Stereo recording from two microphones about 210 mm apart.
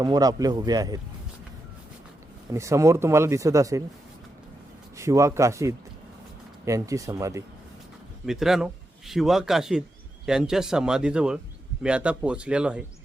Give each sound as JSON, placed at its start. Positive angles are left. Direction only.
{"t": 0.0, "sound": "speech", "side_deg": -20}
{"t": 2.5, "sound": "speech", "side_deg": -15}
{"t": 4.9, "sound": "speech", "side_deg": -15}
{"t": 8.3, "sound": "speech", "side_deg": 0}